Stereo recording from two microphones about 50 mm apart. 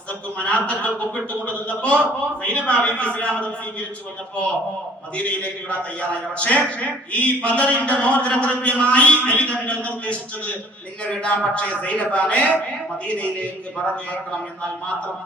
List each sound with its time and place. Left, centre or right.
0.3 s a man's voice: left
5.1 s a man's voice: left